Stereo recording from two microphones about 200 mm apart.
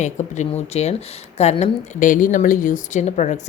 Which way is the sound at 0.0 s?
35° left (ahead or behind).